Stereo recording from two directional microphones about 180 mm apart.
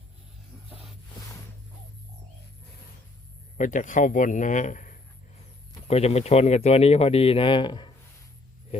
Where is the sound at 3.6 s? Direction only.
45° left (ahead or behind); by 7.9 s 25° left (ahead or behind).